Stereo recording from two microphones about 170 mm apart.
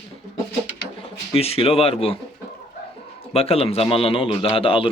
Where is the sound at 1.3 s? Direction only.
35° left (ahead or behind).